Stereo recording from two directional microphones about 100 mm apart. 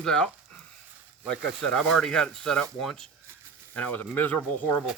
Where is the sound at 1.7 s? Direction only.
5° left (ahead or behind).